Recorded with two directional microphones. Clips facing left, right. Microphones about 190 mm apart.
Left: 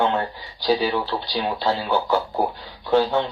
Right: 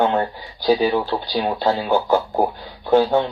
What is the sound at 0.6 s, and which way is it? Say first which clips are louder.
Speech: right 4 dB; 50° right (ahead or behind).